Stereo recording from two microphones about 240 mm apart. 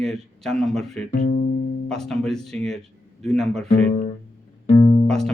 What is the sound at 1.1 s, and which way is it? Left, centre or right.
Speech, left.